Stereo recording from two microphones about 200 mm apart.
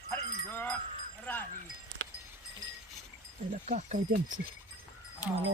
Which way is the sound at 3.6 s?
35° right (ahead or behind).